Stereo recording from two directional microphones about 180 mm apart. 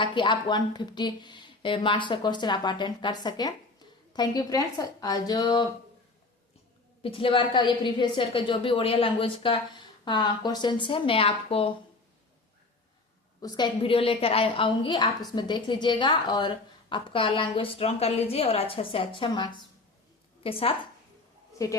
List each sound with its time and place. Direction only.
0.0 s a woman's voice: 25° left (ahead or behind)
7.0 s a woman's voice: 30° left (ahead or behind)
13.4 s a woman's voice: 25° left (ahead or behind)
21.6 s a woman's voice: 20° left (ahead or behind)